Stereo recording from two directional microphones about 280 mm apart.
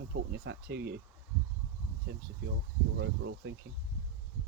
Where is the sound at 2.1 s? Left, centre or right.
Right.